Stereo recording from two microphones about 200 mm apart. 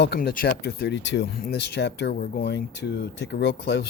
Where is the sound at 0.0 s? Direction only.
55° left (ahead or behind).